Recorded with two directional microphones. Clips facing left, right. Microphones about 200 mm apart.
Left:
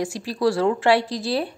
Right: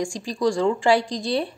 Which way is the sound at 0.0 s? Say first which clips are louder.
Left 1 dB; 5° left (ahead or behind).